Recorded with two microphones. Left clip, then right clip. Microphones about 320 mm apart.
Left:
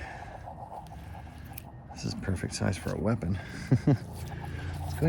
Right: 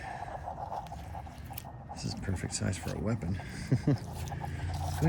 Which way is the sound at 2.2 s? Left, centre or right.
Left.